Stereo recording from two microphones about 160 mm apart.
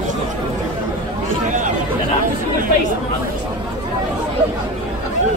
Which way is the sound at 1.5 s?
55° right (ahead or behind).